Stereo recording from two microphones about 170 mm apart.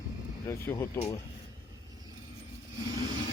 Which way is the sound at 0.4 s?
15° left (ahead or behind).